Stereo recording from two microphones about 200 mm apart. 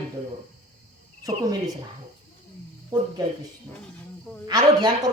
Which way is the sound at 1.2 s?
20° right (ahead or behind).